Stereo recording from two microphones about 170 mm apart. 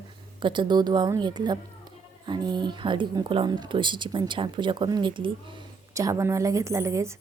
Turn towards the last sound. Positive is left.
turn(degrees=-15)  # may be behind; listen again after turning